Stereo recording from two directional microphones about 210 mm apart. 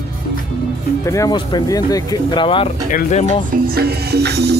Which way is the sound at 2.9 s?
35° left (ahead or behind).